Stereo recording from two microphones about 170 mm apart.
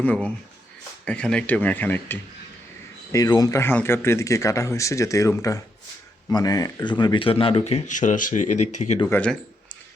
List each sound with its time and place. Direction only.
0.0 s speech: 5° left (ahead or behind)
3.1 s speech: 20° left (ahead or behind); by 9.0 s 45° left (ahead or behind)
9.0 s speech: 10° left (ahead or behind)